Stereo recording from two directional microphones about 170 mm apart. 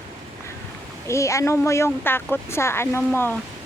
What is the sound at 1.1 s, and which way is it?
Speech, 15° left (ahead or behind).